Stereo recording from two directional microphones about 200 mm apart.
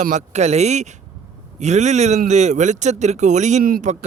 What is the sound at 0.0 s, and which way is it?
Speech, 35° right (ahead or behind).